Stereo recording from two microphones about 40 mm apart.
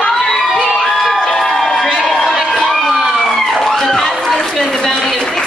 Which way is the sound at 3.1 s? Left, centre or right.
Centre.